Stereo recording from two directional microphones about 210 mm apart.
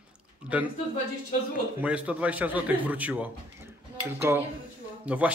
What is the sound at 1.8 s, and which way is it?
A man's voice, 5° right (ahead or behind).